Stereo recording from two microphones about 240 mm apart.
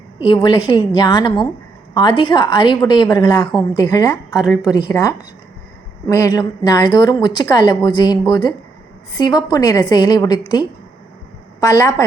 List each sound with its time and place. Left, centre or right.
0.3 s a woman's voice: centre